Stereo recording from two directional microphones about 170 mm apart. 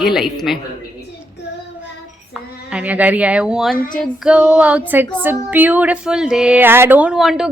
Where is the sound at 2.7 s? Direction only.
5° right (ahead or behind).